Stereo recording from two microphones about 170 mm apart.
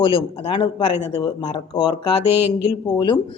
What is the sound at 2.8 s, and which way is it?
Speech, 25° left (ahead or behind).